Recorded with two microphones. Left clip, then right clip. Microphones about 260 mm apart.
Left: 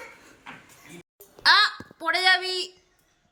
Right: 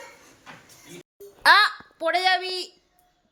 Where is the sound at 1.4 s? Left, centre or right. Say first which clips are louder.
Right 2 dB; centre.